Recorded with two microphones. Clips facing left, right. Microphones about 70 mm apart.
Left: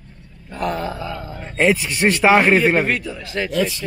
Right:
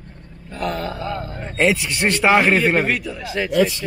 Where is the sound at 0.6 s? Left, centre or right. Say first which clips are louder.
Left 1 dB; centre.